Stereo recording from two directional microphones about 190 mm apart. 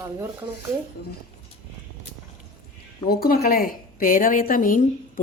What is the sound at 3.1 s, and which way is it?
A woman's voice, 50° left (ahead or behind).